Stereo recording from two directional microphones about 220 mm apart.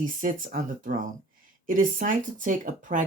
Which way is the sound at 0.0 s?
40° right (ahead or behind).